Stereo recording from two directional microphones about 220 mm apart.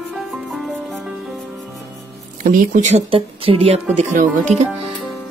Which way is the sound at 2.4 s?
35° right (ahead or behind).